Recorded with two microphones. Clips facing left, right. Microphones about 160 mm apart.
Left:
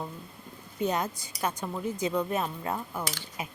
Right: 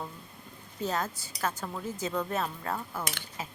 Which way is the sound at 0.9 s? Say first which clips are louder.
Left 2 dB; 15° left (ahead or behind).